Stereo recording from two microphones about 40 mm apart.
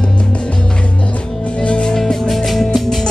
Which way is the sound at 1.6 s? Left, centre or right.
Left.